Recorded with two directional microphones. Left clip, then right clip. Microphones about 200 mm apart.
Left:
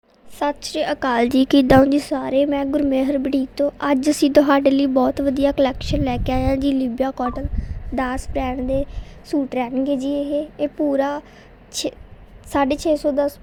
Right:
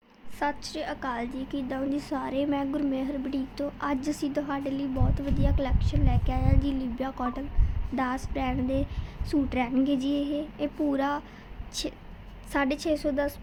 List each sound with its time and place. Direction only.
0.3 s a woman's voice: 40° left (ahead or behind); by 13.3 s 20° left (ahead or behind)